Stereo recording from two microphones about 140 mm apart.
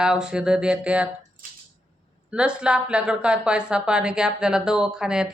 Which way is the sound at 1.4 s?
85° right.